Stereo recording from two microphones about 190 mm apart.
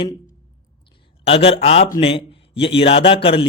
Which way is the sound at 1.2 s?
30° left (ahead or behind).